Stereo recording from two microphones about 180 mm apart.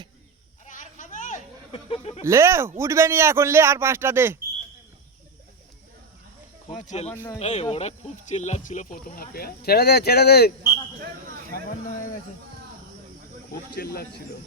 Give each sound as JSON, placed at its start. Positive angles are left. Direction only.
{"t": 0.6, "sound": "a sound", "side_deg": 45}
{"t": 1.7, "sound": "chuckle", "side_deg": 35}
{"t": 2.2, "sound": "speech", "side_deg": -15}
{"t": 6.7, "sound": "speech", "side_deg": 40}
{"t": 13.7, "sound": "speech", "side_deg": 60}